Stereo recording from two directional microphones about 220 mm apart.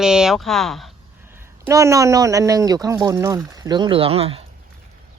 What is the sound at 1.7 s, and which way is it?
Speech, 15° right (ahead or behind).